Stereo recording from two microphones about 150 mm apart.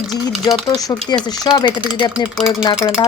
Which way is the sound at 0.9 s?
20° left (ahead or behind).